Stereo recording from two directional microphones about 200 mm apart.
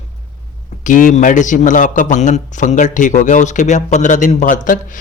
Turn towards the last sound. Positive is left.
turn(degrees=40)  # may be behind; listen again after turning